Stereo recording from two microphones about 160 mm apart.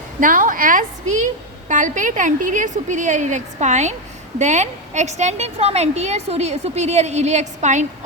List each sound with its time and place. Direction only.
0.2 s a woman's voice: 55° right (ahead or behind)